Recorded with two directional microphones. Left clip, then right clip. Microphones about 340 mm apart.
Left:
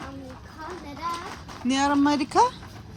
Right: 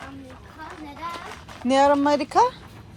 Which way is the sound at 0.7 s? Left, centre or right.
Centre.